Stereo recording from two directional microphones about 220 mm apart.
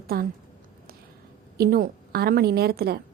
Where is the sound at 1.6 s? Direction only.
40° right (ahead or behind).